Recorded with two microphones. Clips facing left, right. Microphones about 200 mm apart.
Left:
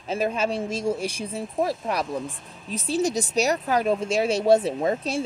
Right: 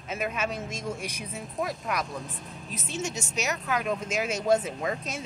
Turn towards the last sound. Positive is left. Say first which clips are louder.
# left 8 dB
turn(degrees=30)  # may be behind; listen again after turning